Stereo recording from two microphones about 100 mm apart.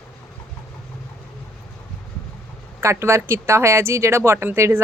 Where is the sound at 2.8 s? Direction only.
25° right (ahead or behind).